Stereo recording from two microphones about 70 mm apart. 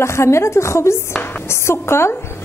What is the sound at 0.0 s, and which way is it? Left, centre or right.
A woman's voice, left.